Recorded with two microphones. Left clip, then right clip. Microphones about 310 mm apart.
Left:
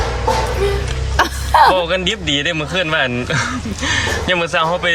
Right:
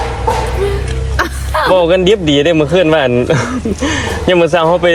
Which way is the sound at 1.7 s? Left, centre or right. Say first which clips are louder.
Right 8 dB; centre.